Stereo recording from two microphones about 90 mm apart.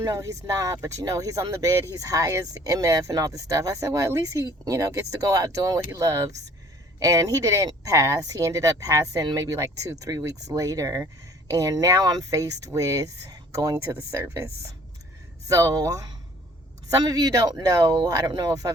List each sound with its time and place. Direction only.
0.0 s speech: 40° right (ahead or behind)
13.7 s speech: 30° right (ahead or behind)